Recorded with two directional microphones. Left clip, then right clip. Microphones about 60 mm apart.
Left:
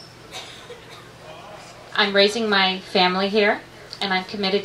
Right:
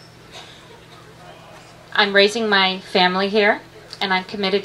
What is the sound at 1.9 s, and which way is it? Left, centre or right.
A woman's voice, right.